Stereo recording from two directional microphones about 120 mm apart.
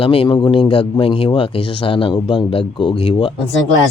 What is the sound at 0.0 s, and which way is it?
Speech, 50° left (ahead or behind).